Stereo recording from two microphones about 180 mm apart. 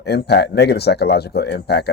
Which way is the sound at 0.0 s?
65° left (ahead or behind).